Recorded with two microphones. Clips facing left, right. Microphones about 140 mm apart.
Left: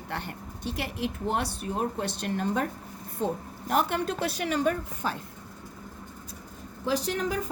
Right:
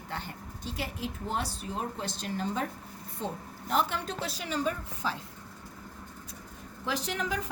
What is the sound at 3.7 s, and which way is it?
A woman's voice, 60° left (ahead or behind).